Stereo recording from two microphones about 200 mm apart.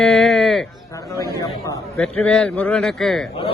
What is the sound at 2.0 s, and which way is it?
A man's voice, 5° left (ahead or behind).